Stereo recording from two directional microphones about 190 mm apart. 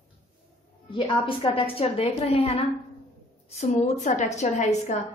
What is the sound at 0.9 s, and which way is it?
A woman's voice, 25° left (ahead or behind).